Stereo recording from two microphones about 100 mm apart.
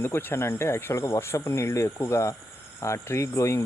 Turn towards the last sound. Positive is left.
turn(degrees=30)  # may be behind; listen again after turning